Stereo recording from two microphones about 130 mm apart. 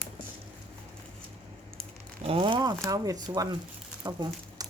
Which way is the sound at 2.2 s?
45° right (ahead or behind).